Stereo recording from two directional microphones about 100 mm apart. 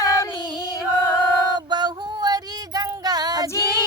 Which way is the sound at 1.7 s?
45° right (ahead or behind).